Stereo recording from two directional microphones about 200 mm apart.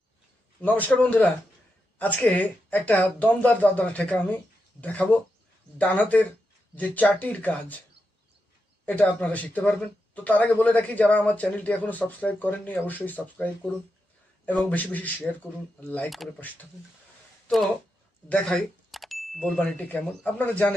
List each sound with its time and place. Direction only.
0.6 s speech: 10° left (ahead or behind)
8.9 s speech: 5° left (ahead or behind)
18.3 s speech: 5° left (ahead or behind)